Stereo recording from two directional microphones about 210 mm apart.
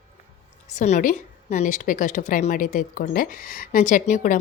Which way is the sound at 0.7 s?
35° left (ahead or behind).